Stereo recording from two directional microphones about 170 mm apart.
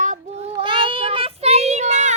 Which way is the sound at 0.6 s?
30° right (ahead or behind).